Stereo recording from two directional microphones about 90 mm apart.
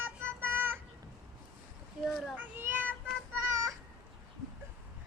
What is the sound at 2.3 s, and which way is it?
Cat, 20° right (ahead or behind).